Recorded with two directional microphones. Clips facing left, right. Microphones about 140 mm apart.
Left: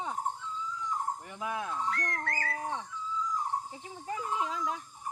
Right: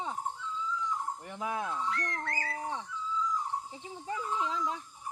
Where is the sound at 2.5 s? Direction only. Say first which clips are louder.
Left 1 dB; 20° right (ahead or behind).